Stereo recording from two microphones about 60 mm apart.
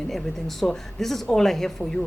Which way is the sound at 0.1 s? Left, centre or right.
Centre.